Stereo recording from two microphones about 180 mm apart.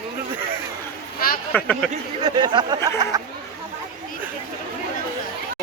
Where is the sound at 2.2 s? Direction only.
25° right (ahead or behind).